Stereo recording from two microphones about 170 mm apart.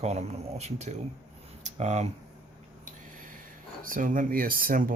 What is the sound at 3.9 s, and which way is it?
Speech, 50° right (ahead or behind).